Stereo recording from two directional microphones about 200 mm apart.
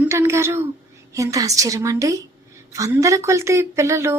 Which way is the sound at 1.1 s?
15° right (ahead or behind).